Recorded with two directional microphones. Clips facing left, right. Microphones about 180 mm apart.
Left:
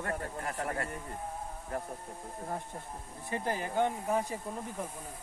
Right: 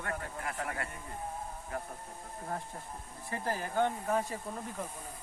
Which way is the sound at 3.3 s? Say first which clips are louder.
Left 1 dB; 20° left (ahead or behind).